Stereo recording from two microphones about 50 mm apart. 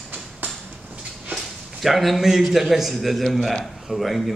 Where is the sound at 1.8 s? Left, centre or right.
Centre.